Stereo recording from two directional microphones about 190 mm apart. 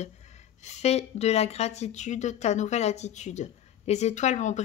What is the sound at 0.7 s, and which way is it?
Speech, 35° left (ahead or behind).